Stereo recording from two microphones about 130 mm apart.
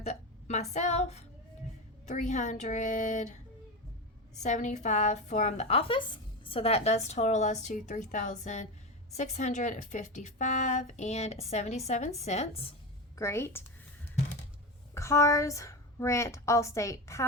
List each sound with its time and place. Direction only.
0.0 s speech: 60° left (ahead or behind)
4.4 s a woman's voice: 65° left (ahead or behind)
13.1 s a woman's voice: 20° left (ahead or behind)
14.9 s a woman's voice: 20° left (ahead or behind)